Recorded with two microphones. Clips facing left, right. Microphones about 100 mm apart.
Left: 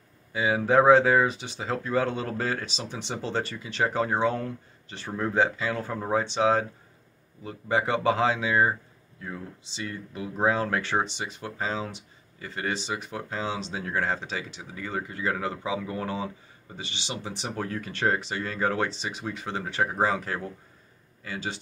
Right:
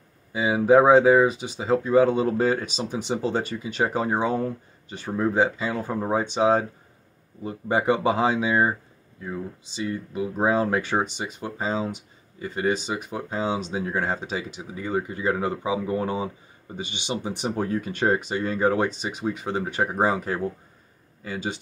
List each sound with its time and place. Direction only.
0.4 s speech: 5° right (ahead or behind); by 7.8 s 30° right (ahead or behind)
7.8 s speech: 15° right (ahead or behind)
9.8 s speech: 15° right (ahead or behind)